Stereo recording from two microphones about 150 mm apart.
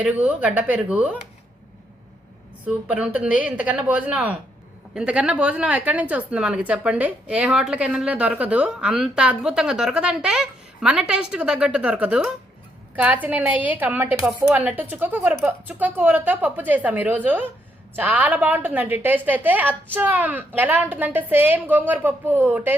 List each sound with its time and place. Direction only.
0.0 s a woman's voice: 10° right (ahead or behind)
2.6 s a woman's voice: 10° right (ahead or behind)